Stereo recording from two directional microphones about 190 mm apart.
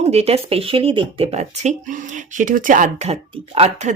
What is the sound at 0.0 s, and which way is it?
Speech, 35° right (ahead or behind).